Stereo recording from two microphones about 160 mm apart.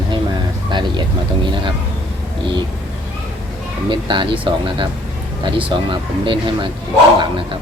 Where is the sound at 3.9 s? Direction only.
30° right (ahead or behind).